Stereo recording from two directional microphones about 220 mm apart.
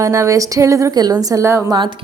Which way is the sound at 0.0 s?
15° right (ahead or behind).